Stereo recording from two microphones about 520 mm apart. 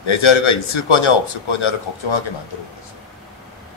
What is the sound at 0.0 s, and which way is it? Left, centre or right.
A man's voice, left.